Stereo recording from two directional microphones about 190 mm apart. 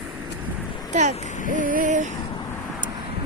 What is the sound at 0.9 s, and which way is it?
Speech, 40° right (ahead or behind).